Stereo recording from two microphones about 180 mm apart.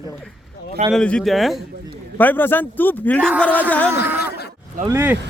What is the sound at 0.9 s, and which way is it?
Speech, 5° left (ahead or behind).